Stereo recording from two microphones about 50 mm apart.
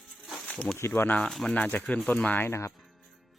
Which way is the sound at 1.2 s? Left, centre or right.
Centre.